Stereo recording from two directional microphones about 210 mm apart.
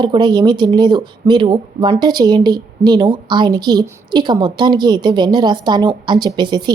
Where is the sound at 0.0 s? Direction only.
20° right (ahead or behind).